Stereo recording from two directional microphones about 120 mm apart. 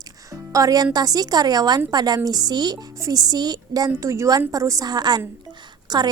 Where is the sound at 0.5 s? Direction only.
30° right (ahead or behind).